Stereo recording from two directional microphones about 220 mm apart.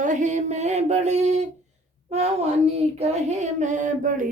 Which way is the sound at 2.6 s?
25° right (ahead or behind).